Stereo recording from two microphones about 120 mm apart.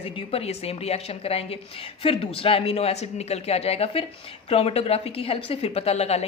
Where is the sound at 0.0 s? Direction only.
55° left (ahead or behind).